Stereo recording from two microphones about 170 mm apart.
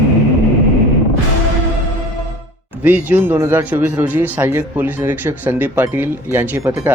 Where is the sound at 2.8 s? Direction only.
10° right (ahead or behind).